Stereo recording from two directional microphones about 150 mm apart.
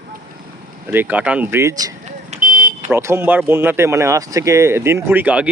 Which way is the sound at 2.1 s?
50° right (ahead or behind).